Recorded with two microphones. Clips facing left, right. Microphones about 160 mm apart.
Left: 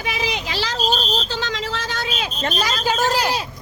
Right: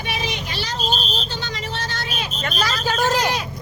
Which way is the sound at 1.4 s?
90° left.